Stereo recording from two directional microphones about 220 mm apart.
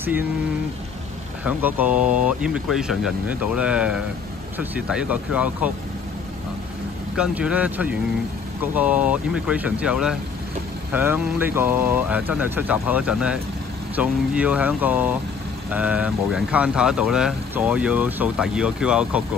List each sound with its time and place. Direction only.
1.4 s speech: 5° right (ahead or behind)
7.2 s speech: 5° right (ahead or behind)